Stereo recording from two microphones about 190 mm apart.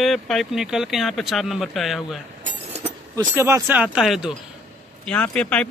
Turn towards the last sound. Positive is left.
turn(degrees=5)  # may be behind; listen again after turning